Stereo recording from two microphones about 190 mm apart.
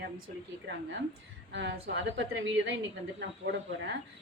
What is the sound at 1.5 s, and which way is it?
A woman's voice, 65° right (ahead or behind).